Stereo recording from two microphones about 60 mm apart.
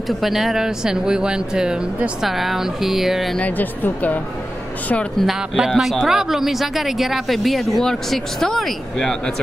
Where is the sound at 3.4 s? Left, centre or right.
Left.